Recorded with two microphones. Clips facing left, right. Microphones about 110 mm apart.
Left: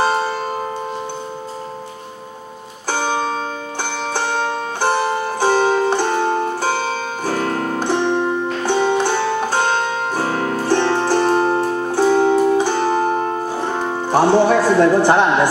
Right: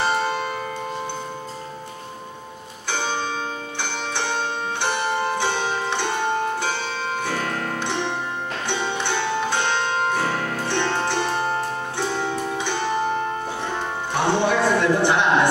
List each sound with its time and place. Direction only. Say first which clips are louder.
0.0 s music: left 4 dB; 40° left (ahead or behind)
2.9 s music: left 6 dB; 40° left (ahead or behind)